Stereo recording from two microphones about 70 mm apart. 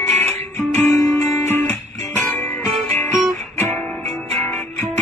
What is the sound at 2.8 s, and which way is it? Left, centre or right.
Music, left.